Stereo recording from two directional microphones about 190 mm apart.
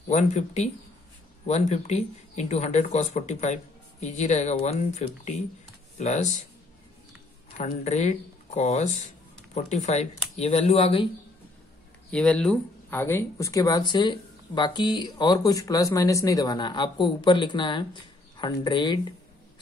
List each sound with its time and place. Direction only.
0.1 s speech: 40° left (ahead or behind)
7.5 s speech: 35° left (ahead or behind)
12.1 s speech: 5° left (ahead or behind); by 19.1 s 25° left (ahead or behind)